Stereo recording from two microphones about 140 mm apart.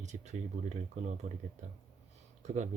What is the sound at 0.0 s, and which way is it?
Speech, 55° right (ahead or behind).